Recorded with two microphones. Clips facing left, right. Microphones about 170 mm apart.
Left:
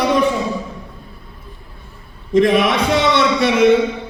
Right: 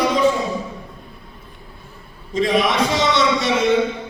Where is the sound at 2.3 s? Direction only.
60° left (ahead or behind).